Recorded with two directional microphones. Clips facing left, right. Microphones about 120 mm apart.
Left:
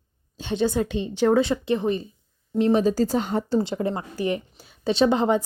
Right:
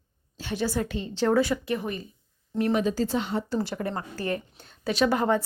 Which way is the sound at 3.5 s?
20° left (ahead or behind).